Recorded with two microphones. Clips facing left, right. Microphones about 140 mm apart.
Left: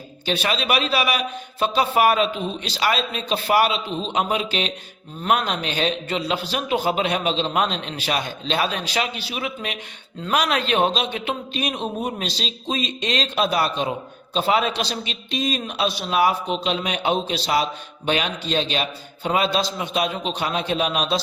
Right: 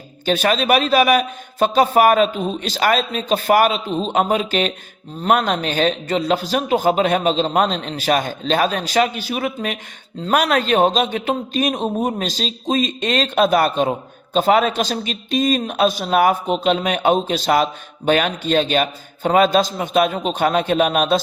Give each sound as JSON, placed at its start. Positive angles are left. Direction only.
{"t": 0.3, "sound": "a man's voice", "side_deg": -45}